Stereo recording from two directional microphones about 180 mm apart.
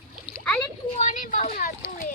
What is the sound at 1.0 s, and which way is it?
Speech, 45° left (ahead or behind).